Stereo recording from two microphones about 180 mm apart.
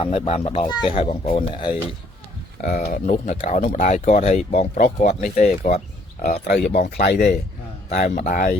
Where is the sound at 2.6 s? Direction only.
50° left (ahead or behind).